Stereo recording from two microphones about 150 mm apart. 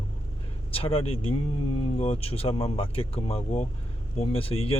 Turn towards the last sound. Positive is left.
turn(degrees=40)  # may be behind; listen again after turning